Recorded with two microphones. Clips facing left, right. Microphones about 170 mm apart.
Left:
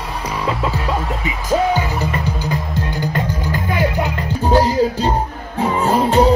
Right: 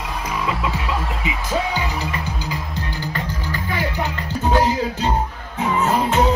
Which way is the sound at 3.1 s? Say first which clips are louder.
Left 6 dB; 45° left (ahead or behind).